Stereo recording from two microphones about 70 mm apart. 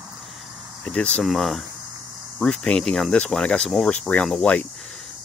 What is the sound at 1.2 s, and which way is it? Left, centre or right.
Speech, centre.